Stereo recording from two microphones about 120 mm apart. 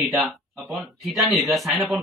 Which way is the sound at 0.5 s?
25° right (ahead or behind).